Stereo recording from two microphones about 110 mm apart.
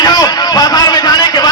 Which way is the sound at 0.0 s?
35° left (ahead or behind).